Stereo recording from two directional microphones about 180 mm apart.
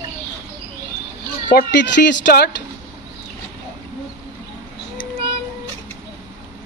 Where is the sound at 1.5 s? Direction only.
55° left (ahead or behind).